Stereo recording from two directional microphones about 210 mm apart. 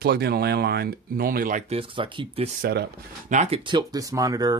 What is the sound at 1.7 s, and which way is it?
Speech, 25° right (ahead or behind).